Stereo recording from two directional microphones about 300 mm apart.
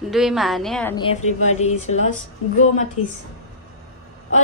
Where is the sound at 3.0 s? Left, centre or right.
Left.